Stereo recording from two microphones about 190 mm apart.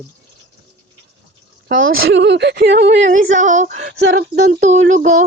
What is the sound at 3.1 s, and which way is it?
Female singing, 40° right (ahead or behind).